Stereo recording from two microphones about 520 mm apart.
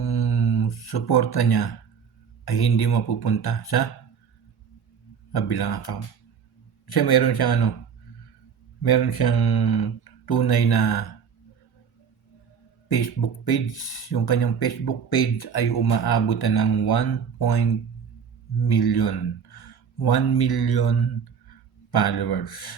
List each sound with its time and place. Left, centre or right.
0.0 s music: left
2.4 s speech: left
5.3 s speech: left
8.8 s speech: left
12.9 s speech: left
18.7 s speech: left
21.9 s speech: left